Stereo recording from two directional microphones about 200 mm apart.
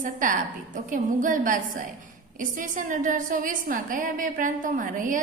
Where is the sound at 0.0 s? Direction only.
40° right (ahead or behind).